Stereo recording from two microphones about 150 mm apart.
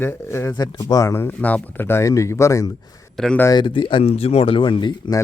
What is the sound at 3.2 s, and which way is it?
Speech, 5° left (ahead or behind).